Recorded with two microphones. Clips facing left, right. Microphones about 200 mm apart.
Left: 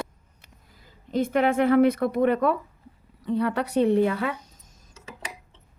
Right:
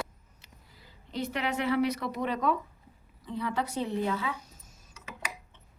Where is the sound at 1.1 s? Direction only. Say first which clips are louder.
Left 10 dB; 50° left (ahead or behind).